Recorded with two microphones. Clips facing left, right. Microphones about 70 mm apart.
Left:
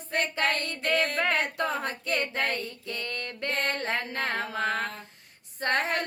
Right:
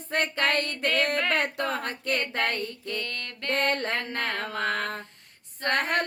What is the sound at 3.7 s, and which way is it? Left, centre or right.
Female singing, right.